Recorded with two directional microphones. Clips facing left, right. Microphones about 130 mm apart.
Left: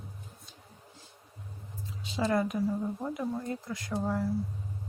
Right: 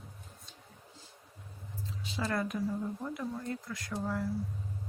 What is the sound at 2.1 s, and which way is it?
Speech, 20° left (ahead or behind).